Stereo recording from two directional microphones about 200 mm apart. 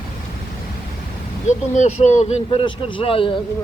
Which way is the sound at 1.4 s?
35° left (ahead or behind).